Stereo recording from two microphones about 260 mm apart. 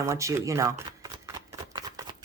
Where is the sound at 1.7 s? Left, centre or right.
Centre.